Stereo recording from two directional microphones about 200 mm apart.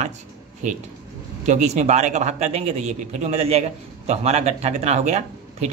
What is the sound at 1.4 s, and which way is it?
Speech, 35° right (ahead or behind).